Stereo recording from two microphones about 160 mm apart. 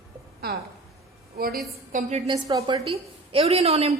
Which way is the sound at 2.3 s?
25° right (ahead or behind).